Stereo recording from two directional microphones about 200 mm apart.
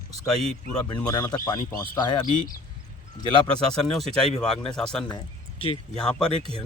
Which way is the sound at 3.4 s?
Centre (ahead or behind).